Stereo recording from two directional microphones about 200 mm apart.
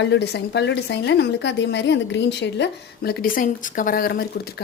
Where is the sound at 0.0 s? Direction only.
60° left (ahead or behind).